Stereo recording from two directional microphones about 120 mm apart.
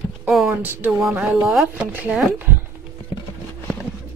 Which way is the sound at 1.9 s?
15° right (ahead or behind).